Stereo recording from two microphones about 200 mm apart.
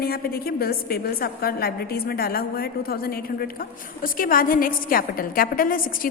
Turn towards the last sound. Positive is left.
turn(degrees=45)  # may be behind; listen again after turning